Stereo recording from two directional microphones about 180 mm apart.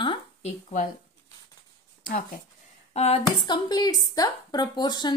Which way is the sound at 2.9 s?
35° left (ahead or behind).